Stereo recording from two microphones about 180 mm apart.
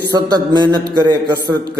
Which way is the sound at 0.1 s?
20° right (ahead or behind).